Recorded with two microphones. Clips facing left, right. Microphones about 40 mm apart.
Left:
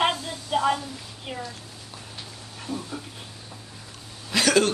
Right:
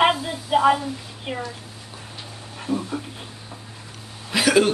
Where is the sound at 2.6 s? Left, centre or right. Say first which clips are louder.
Right 7 dB; centre.